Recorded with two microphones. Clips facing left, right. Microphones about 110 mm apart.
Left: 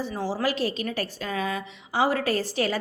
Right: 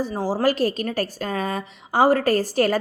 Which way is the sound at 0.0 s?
40° right (ahead or behind).